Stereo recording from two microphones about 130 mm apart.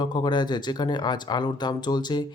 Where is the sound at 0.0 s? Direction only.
35° left (ahead or behind).